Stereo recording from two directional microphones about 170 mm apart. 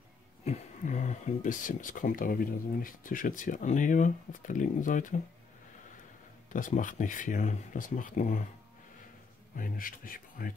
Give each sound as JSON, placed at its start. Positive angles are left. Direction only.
{"t": 0.5, "sound": "speech", "side_deg": 45}
{"t": 6.5, "sound": "speech", "side_deg": 50}
{"t": 9.6, "sound": "speech", "side_deg": 55}